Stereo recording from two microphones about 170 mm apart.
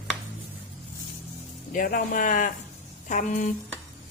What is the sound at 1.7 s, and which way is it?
A woman's voice, 55° left (ahead or behind).